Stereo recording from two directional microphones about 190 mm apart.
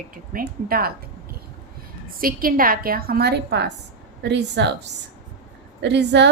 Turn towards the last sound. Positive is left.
turn(degrees=-65)  # may be behind; listen again after turning